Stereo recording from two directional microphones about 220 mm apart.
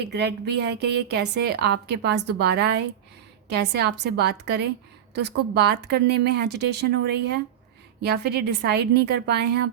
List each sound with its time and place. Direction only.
0.0 s a woman's voice: 50° right (ahead or behind)